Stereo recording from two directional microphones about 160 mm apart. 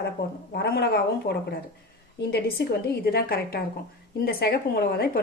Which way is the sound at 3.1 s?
70° left (ahead or behind).